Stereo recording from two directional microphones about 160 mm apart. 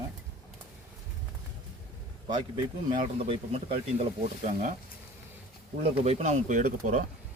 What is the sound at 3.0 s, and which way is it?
Speech, 40° right (ahead or behind).